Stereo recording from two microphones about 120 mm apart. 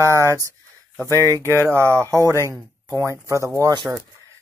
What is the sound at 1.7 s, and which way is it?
Speech, 20° right (ahead or behind).